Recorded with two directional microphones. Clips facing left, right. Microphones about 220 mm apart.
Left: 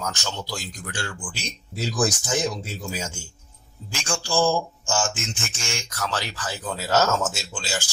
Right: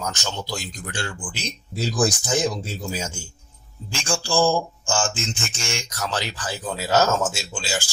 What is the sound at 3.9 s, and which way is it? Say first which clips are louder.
Speech: right 3 dB; 30° right (ahead or behind).